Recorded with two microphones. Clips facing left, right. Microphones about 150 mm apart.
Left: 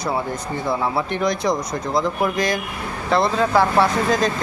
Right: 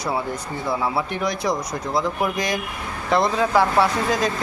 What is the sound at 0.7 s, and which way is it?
Speech, 5° right (ahead or behind).